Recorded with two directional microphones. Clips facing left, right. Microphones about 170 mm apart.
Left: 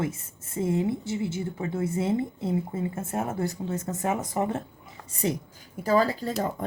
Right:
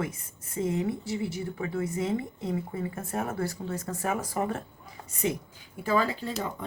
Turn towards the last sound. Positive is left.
turn(degrees=45)  # may be behind; listen again after turning